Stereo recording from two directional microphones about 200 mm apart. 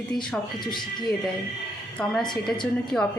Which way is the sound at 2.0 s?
5° left (ahead or behind).